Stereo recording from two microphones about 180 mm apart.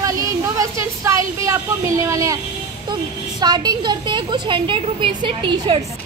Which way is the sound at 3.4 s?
25° right (ahead or behind).